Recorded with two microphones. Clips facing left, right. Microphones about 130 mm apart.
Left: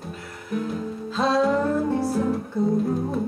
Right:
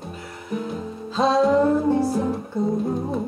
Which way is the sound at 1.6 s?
25° right (ahead or behind).